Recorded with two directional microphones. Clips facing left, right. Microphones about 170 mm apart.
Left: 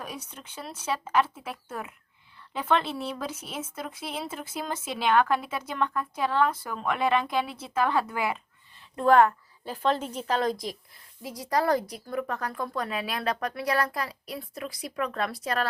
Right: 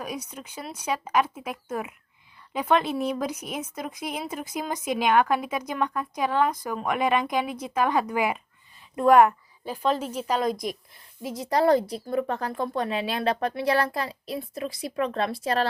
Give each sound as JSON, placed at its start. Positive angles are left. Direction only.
{"t": 0.0, "sound": "a woman's voice", "side_deg": -10}